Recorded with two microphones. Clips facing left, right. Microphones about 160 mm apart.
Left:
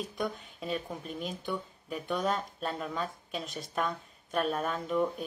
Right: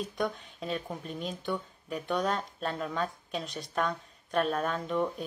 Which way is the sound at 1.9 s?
40° right (ahead or behind).